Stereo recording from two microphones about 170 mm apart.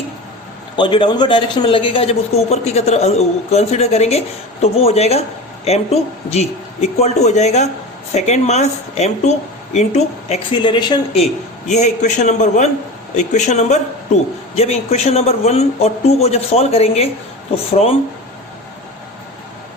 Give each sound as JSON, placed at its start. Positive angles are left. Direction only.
{"t": 0.8, "sound": "speech", "side_deg": 25}
{"t": 11.7, "sound": "a man's voice", "side_deg": 45}